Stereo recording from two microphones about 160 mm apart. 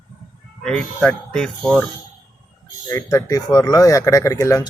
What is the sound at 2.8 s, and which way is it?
Speech, 15° left (ahead or behind).